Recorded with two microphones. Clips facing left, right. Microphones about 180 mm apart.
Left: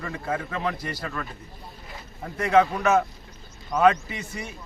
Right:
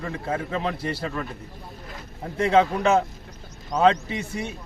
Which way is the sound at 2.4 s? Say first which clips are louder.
Right 1 dB; 25° right (ahead or behind).